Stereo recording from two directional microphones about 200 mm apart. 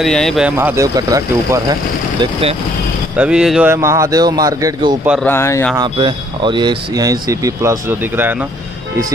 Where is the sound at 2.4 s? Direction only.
30° right (ahead or behind).